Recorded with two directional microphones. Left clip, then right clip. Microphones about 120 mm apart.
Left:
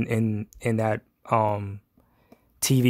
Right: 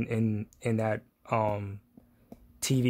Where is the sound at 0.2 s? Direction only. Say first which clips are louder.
Left 4 dB; 35° left (ahead or behind).